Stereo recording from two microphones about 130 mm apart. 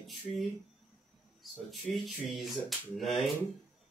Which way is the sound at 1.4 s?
Centre (ahead or behind).